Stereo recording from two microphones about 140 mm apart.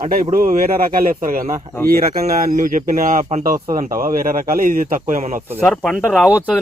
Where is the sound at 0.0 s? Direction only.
80° right.